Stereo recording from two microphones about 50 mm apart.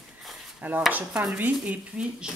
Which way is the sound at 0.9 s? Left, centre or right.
Right.